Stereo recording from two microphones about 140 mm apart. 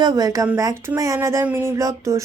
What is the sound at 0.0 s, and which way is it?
A woman's voice, 30° right (ahead or behind).